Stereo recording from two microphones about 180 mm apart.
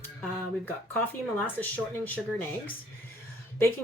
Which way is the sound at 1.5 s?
10° left (ahead or behind).